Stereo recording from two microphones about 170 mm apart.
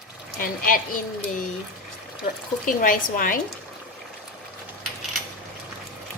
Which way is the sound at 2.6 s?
55° left (ahead or behind).